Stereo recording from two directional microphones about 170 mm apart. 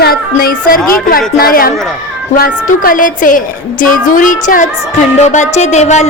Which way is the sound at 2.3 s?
55° left (ahead or behind).